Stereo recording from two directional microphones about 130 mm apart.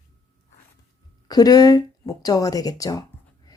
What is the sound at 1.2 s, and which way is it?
A woman's voice, 30° left (ahead or behind).